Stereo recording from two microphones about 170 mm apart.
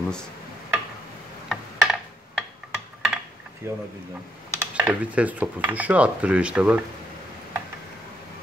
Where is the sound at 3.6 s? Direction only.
15° right (ahead or behind).